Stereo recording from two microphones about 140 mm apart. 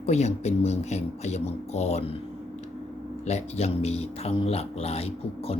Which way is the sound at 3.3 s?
50° left (ahead or behind).